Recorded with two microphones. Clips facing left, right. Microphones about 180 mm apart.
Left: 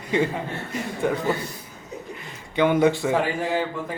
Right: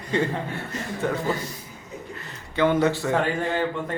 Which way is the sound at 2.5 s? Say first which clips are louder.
Left 2 dB; 15° left (ahead or behind).